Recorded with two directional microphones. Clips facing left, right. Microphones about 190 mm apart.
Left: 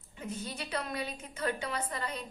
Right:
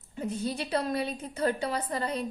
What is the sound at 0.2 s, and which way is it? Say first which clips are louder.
A woman's voice: right 8 dB; 35° right (ahead or behind).